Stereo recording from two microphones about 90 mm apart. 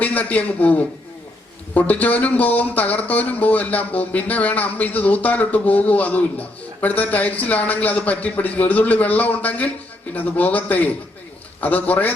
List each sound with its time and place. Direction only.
0.0 s a man's voice: 15° left (ahead or behind)